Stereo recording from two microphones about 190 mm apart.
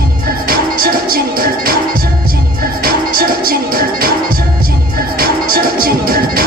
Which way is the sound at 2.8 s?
50° right (ahead or behind).